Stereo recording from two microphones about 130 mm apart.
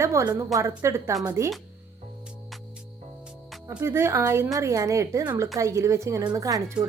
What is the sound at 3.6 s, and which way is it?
A woman's voice, 20° right (ahead or behind).